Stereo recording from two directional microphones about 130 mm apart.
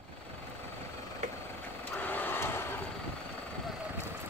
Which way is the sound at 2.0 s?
15° left (ahead or behind).